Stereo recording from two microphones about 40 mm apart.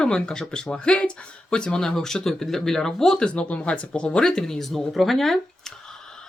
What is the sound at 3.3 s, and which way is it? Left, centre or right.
Speech, left.